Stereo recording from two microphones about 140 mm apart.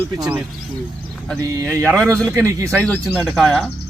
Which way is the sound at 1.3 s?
20° right (ahead or behind).